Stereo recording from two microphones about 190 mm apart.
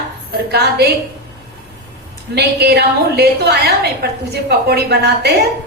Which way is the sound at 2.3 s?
60° right (ahead or behind).